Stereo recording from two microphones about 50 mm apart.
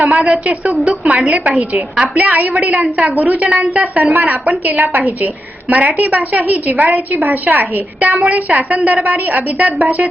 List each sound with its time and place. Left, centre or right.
0.0 s a woman's voice: right